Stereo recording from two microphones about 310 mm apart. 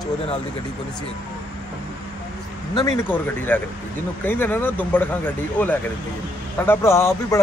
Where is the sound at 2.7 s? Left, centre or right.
Centre.